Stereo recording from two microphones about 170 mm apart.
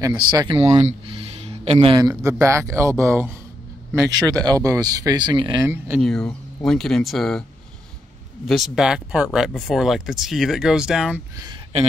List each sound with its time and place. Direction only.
0.0 s speech: 25° right (ahead or behind)
0.8 s a sound: 35° right (ahead or behind)
2.0 s speech: 20° right (ahead or behind)
5.9 s speech: 5° left (ahead or behind)
8.5 s speech: centre (ahead or behind)
11.3 s speech: 25° right (ahead or behind)